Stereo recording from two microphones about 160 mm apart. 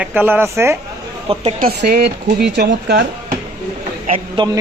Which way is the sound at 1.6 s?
80° right.